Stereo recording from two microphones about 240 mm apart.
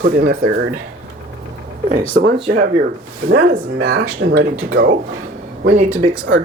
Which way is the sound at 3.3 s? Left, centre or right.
Right.